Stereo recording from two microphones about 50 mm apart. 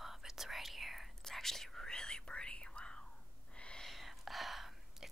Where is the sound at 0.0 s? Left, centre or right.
Centre.